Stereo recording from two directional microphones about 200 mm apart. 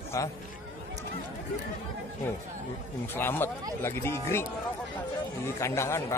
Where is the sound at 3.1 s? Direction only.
10° left (ahead or behind).